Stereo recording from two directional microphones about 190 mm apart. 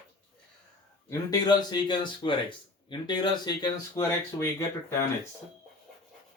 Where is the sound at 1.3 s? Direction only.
20° left (ahead or behind).